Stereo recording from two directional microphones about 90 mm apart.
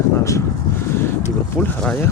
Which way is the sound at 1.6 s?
10° left (ahead or behind).